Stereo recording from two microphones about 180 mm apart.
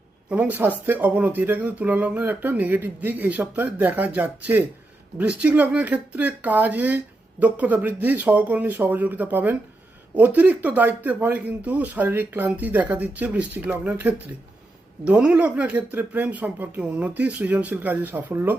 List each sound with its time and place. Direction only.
0.3 s speech: 10° right (ahead or behind)